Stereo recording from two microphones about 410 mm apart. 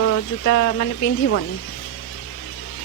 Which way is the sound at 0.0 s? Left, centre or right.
Left.